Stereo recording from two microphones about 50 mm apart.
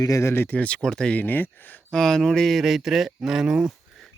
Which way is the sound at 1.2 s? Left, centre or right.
Left.